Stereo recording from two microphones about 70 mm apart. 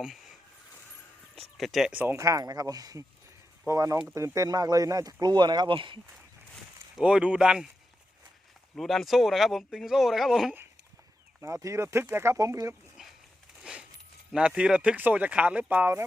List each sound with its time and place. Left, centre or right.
0.0 s speech: centre
1.4 s speech: centre
1.9 s speech: right
2.1 s speech: right
3.7 s speech: right
4.4 s speech: right
5.2 s speech: right
7.0 s speech: centre
8.7 s speech: centre
11.3 s speech: right
13.7 s a sound: centre
14.3 s speech: centre